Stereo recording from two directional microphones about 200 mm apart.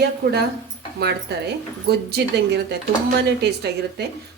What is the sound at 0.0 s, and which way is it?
A woman's voice, 55° right (ahead or behind).